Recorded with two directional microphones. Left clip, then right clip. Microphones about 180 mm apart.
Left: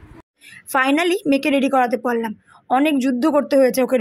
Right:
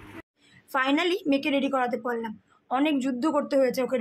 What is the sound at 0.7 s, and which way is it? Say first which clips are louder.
A woman's voice: left 7 dB; 35° left (ahead or behind).